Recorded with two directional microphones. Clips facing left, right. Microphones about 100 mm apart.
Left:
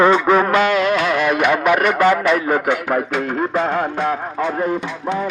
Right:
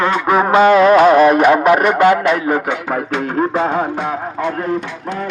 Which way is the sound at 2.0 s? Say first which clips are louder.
Right 3 dB; 15° right (ahead or behind).